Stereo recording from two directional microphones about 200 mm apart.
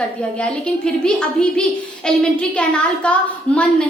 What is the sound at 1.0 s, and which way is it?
A woman's voice, 5° left (ahead or behind).